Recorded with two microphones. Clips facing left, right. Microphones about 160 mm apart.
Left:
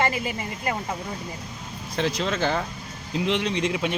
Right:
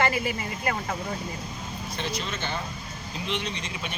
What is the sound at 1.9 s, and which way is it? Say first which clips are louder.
Speech: left 8 dB; 90° left.